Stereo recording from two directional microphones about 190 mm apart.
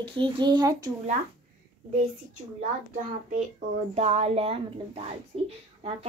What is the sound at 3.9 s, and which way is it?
Speech, 35° right (ahead or behind).